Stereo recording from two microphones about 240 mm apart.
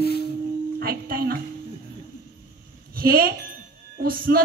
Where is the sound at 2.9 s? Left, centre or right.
Right.